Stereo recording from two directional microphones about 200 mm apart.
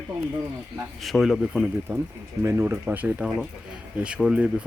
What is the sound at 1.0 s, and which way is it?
Speech, centre (ahead or behind).